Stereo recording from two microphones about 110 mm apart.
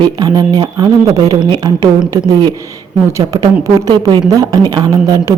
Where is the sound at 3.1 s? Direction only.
25° right (ahead or behind).